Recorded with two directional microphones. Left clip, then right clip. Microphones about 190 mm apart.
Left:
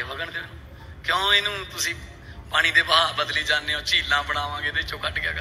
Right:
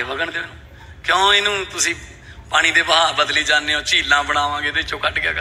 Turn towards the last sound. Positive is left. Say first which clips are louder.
# right 7 dB
turn(degrees=15)  # may be behind; listen again after turning